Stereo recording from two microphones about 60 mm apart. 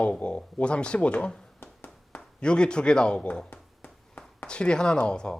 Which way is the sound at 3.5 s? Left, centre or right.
Left.